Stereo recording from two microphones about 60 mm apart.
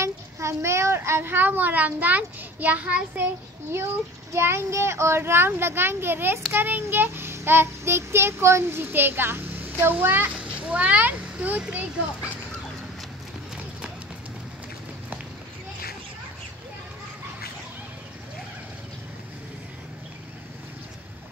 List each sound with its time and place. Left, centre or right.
0.0 s child singing: right
1.3 s a child's voice: right
3.7 s a child's voice: right